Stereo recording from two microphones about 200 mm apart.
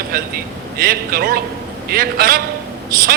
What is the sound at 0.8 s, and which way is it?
A man's voice, 50° right (ahead or behind).